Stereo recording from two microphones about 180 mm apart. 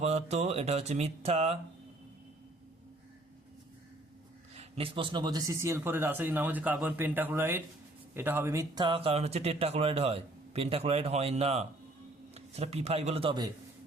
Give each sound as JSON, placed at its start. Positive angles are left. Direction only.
{"t": 0.0, "sound": "speech", "side_deg": -40}
{"t": 4.5, "sound": "speech", "side_deg": -35}